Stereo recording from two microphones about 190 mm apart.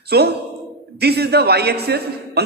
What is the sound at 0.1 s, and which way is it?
A man's voice, 60° right (ahead or behind).